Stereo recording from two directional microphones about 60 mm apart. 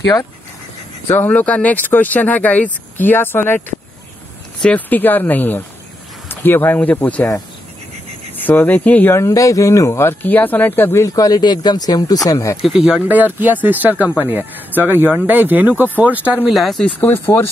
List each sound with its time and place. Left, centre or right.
1.3 s speech: left
4.6 s speech: left
8.5 s speech: left
9.3 s speech: left
9.9 s speech: left
11.1 s speech: left
12.6 s speech: centre
13.0 s speech: right
16.4 s speech: centre
17.0 s speech: left